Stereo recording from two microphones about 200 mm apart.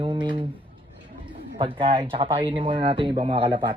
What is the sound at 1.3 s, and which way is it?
Bird, 25° right (ahead or behind).